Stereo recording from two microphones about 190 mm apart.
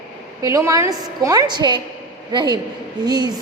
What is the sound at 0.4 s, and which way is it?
A woman's voice, 20° right (ahead or behind).